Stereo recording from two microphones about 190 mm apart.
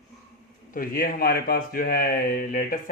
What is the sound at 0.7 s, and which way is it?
Speech, 50° left (ahead or behind).